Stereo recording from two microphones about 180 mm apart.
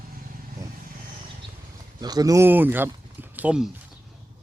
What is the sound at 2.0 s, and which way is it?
Speech, 20° right (ahead or behind).